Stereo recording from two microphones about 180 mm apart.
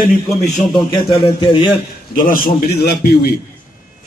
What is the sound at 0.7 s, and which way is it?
Speech, 25° left (ahead or behind).